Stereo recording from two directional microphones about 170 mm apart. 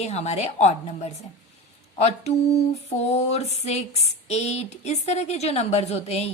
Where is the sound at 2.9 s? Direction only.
40° left (ahead or behind).